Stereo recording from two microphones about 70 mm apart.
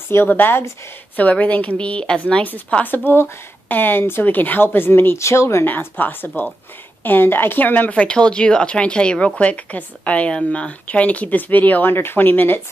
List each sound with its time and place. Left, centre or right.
0.1 s a woman's voice: left
5.7 s speech: left